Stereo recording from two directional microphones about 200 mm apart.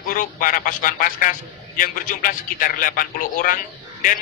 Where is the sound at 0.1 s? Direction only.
45° left (ahead or behind).